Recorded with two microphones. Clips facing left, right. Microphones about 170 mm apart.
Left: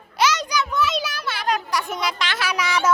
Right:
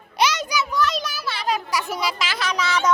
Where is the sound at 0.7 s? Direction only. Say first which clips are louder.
Even; 5° left (ahead or behind).